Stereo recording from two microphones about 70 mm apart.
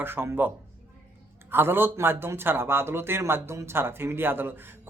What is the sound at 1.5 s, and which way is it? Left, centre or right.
A man's voice, right.